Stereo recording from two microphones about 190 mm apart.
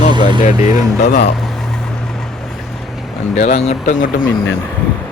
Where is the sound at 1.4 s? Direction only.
Centre (ahead or behind).